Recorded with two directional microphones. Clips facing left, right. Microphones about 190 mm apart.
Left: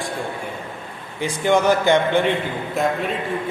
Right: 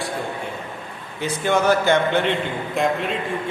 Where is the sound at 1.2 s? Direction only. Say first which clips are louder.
Left 2 dB; 15° left (ahead or behind).